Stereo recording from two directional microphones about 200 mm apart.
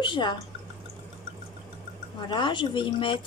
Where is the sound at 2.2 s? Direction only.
25° left (ahead or behind).